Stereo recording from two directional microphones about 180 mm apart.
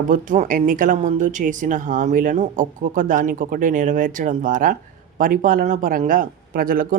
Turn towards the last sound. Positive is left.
turn(degrees=-55)  # may be behind; listen again after turning